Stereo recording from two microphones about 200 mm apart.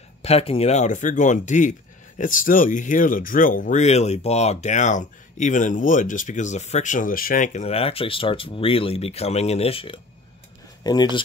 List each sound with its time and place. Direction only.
0.2 s speech: 30° left (ahead or behind)